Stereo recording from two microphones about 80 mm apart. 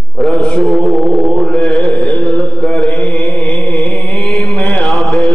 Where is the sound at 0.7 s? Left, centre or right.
Centre.